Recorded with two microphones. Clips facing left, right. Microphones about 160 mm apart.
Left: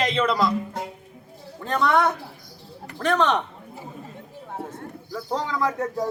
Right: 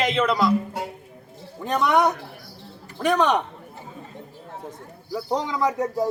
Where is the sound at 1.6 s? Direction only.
15° right (ahead or behind).